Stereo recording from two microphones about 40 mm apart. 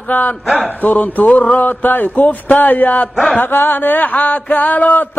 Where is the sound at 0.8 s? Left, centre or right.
Left.